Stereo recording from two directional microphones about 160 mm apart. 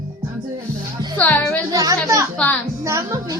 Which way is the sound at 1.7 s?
20° right (ahead or behind).